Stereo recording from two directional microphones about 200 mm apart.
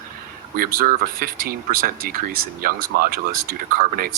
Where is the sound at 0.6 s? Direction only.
45° right (ahead or behind).